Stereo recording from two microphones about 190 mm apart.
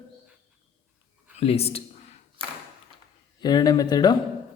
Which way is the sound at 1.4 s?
30° left (ahead or behind).